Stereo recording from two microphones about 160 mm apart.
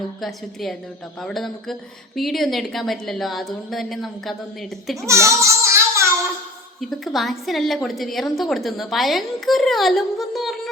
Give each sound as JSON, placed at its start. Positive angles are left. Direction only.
{"t": 0.2, "sound": "a woman's voice", "side_deg": 0}
{"t": 5.0, "sound": "child singing", "side_deg": -20}
{"t": 7.0, "sound": "a woman's voice", "side_deg": 0}